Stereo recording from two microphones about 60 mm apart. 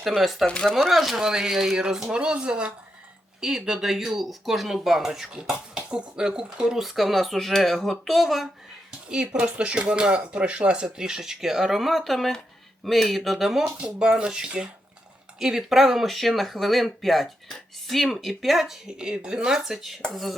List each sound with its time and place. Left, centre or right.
0.2 s speech: centre
0.6 s speech: centre
0.9 s speech: centre
9.0 s speech: centre
15.4 s speech: centre